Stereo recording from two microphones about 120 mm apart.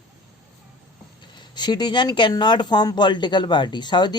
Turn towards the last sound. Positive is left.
turn(degrees=40)  # may be behind; listen again after turning